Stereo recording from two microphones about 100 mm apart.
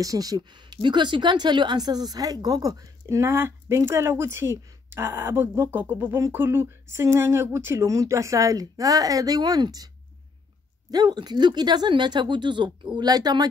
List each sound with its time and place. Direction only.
0.0 s speech: 35° right (ahead or behind)
10.9 s speech: 45° right (ahead or behind)